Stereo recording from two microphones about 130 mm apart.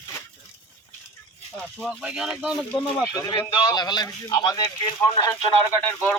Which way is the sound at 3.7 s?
30° left (ahead or behind).